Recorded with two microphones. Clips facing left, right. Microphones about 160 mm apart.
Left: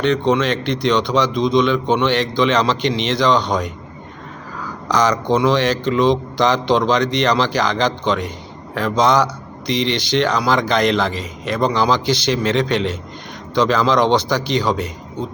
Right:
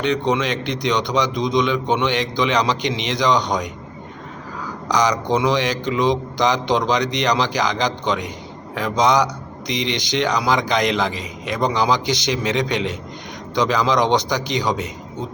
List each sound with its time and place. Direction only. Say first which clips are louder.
0.0 s speech: left 3 dB; 15° right (ahead or behind)
4.9 s speech: left 2 dB; 15° right (ahead or behind)